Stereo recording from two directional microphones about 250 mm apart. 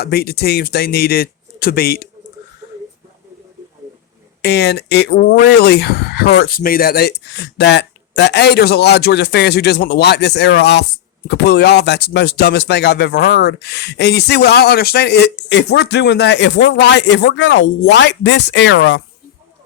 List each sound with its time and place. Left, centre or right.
0.0 s speech: left
4.4 s speech: left